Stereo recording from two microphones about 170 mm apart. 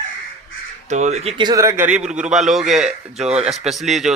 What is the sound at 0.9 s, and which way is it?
Speech, 40° right (ahead or behind).